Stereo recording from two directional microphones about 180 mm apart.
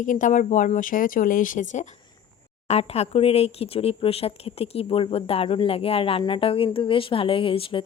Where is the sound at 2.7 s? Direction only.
35° left (ahead or behind).